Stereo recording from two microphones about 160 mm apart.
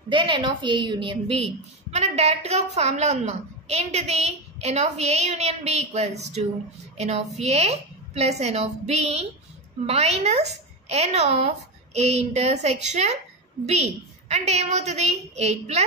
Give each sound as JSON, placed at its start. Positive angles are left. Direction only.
{"t": 0.1, "sound": "a woman's voice", "side_deg": -30}